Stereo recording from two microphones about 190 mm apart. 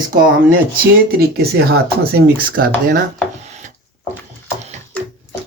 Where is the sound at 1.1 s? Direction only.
55° right (ahead or behind).